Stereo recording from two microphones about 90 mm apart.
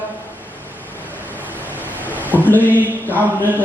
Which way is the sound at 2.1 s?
20° left (ahead or behind).